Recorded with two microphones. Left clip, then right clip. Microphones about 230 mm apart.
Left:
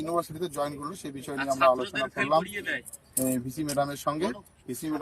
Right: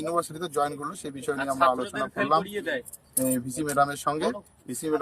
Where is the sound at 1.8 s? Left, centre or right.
Right.